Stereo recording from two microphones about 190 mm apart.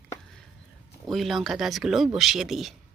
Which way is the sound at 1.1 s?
Centre (ahead or behind).